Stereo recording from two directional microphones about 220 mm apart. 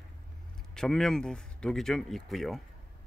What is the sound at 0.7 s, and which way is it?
Speech, centre (ahead or behind).